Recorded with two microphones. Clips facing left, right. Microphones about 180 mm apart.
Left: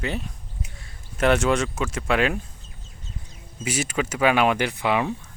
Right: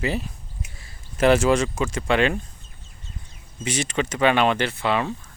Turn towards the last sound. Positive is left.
turn(degrees=15)  # may be behind; listen again after turning